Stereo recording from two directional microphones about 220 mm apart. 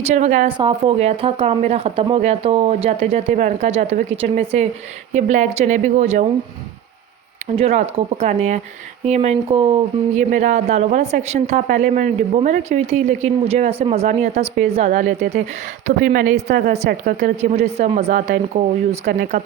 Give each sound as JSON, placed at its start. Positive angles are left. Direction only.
{"t": 0.0, "sound": "speech", "side_deg": -30}
{"t": 7.5, "sound": "speech", "side_deg": -30}